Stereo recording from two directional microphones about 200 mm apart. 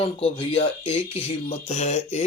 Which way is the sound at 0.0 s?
30° left (ahead or behind).